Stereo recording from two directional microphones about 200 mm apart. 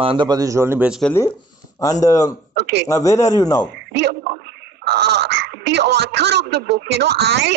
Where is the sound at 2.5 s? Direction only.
60° right (ahead or behind).